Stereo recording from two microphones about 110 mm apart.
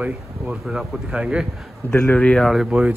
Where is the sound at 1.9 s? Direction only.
15° left (ahead or behind).